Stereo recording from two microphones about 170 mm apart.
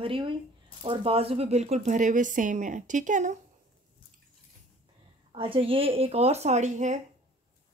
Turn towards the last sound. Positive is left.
turn(degrees=-45)  # may be behind; listen again after turning